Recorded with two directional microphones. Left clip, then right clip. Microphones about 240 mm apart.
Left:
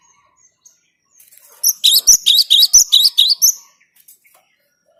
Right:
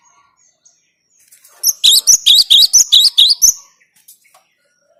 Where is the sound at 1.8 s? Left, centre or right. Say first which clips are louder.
Right 2 dB; centre.